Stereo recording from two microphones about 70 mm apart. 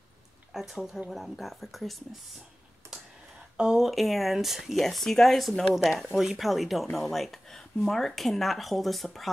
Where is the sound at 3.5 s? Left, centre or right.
Centre.